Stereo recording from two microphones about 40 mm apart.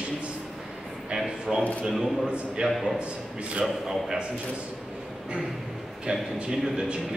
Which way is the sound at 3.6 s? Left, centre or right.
Centre.